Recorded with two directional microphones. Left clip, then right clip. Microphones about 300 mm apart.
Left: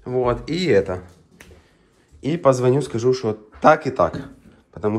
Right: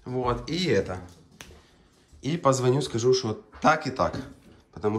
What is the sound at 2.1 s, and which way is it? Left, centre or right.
A man's voice, centre.